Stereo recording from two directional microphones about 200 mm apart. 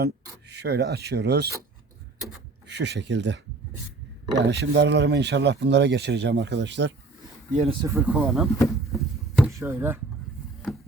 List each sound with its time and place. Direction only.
0.0 s speech: 55° right (ahead or behind)
2.6 s speech: 60° right (ahead or behind)
7.5 s speech: 35° right (ahead or behind)
7.8 s speech: 15° right (ahead or behind)
8.5 s a sound: 15° left (ahead or behind)
9.5 s speech: 15° right (ahead or behind)